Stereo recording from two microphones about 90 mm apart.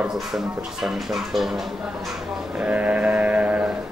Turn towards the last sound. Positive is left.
turn(degrees=-10)  # may be behind; listen again after turning